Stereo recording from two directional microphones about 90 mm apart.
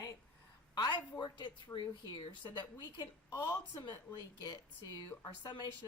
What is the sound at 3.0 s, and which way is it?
Speech, 35° left (ahead or behind).